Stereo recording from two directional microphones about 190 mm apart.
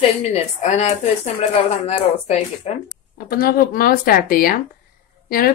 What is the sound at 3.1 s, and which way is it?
Speech, 50° left (ahead or behind).